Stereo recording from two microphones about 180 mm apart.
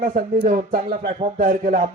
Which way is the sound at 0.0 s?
50° right (ahead or behind).